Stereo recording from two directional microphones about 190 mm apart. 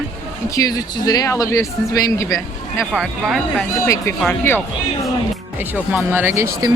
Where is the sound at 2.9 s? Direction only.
Centre (ahead or behind).